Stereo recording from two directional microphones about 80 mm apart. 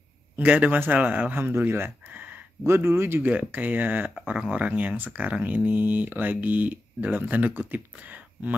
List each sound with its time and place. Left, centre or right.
0.4 s speech: centre
2.6 s speech: right